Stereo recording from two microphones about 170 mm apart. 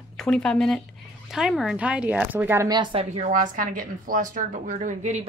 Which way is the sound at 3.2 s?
50° right (ahead or behind).